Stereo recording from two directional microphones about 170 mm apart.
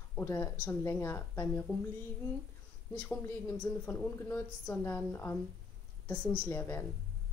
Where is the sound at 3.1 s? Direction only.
10° left (ahead or behind).